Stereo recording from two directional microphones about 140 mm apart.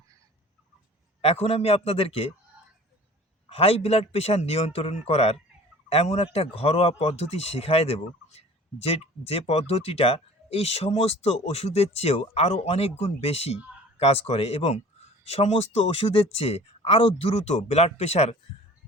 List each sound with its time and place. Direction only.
1.2 s speech: 45° left (ahead or behind)
3.5 s speech: 45° left (ahead or behind)